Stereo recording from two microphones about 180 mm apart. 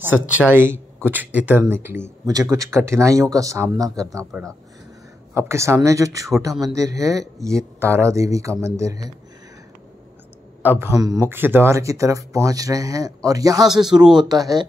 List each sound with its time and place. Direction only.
0.3 s speech: 10° right (ahead or behind)
5.3 s speech: 15° right (ahead or behind)
10.6 s a man's voice: 10° right (ahead or behind)
13.7 s speech: centre (ahead or behind)
14.1 s speech: 20° right (ahead or behind)